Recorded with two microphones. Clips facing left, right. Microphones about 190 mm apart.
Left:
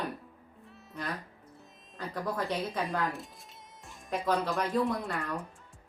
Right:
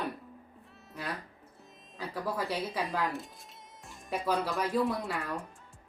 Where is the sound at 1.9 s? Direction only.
5° right (ahead or behind).